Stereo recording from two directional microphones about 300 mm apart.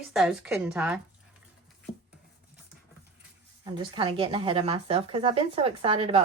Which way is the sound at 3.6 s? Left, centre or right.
Centre.